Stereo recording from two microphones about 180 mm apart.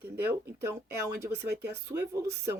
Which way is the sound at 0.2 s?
15° right (ahead or behind).